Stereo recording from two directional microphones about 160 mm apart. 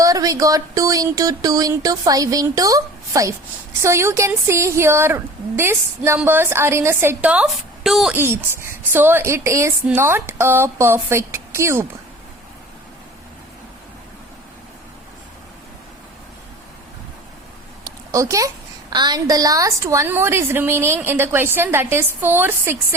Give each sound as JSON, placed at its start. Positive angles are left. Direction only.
{"t": 0.0, "sound": "a sound", "side_deg": -20}
{"t": 3.8, "sound": "a woman's voice", "side_deg": -15}
{"t": 8.1, "sound": "a woman's voice", "side_deg": -15}
{"t": 17.8, "sound": "a woman's voice", "side_deg": -20}